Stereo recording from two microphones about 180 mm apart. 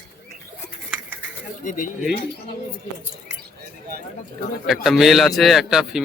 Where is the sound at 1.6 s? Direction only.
45° left (ahead or behind).